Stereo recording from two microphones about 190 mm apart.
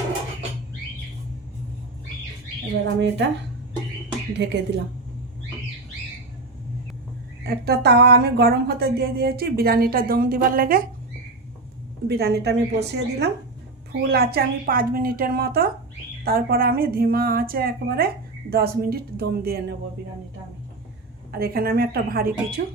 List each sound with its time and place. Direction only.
2.8 s speech: 70° right (ahead or behind)
4.4 s a woman's voice: 65° right (ahead or behind)
7.4 s a woman's voice: 55° right (ahead or behind)
12.0 s a woman's voice: 60° right (ahead or behind)
21.3 s a woman's voice: 55° right (ahead or behind)